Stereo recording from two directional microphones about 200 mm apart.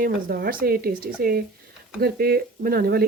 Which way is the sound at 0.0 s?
50° right (ahead or behind).